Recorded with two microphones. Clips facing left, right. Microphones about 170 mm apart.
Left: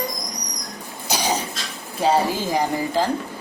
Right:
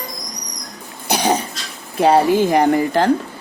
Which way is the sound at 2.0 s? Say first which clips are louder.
Right 7 dB; 60° right (ahead or behind).